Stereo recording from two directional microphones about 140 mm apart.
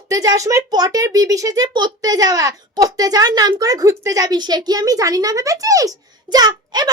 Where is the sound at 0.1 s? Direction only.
25° right (ahead or behind).